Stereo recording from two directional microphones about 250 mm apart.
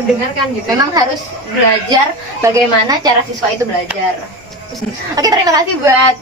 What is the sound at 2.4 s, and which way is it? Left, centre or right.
Speech, centre.